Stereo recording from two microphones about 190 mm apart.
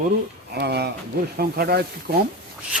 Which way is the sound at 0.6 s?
60° right (ahead or behind).